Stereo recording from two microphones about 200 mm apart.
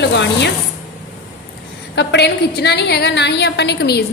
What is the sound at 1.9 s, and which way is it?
A woman's voice, 60° left (ahead or behind).